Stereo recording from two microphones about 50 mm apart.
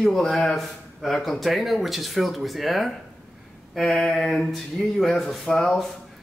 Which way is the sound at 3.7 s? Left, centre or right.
Centre.